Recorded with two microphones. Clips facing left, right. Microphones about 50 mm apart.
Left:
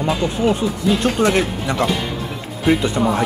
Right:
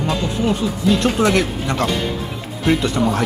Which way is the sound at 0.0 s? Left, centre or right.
Centre.